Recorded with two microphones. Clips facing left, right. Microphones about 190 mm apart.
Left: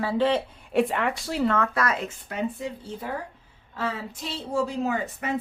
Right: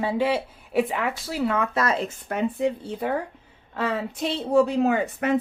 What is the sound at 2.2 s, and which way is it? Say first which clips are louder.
Speech: right 7 dB; 60° right (ahead or behind).